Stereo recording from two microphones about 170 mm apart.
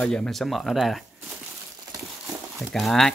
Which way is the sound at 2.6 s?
Centre (ahead or behind).